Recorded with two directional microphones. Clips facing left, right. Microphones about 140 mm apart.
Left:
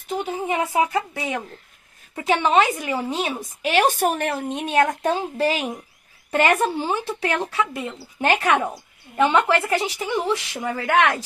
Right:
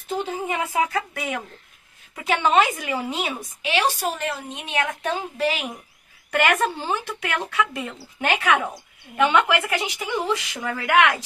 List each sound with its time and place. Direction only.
0.2 s a woman's voice: 20° left (ahead or behind)
7.1 s a woman's voice: 35° left (ahead or behind)
10.0 s a woman's voice: 25° left (ahead or behind)